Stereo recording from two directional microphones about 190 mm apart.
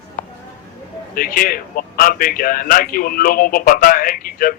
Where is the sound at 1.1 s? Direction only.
50° left (ahead or behind).